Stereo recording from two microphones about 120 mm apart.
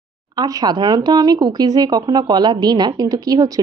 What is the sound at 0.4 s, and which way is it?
Speech, 35° right (ahead or behind).